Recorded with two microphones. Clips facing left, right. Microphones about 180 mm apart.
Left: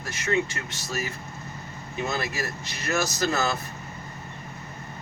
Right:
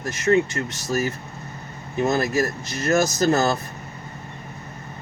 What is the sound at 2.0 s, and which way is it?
Speech, 45° right (ahead or behind).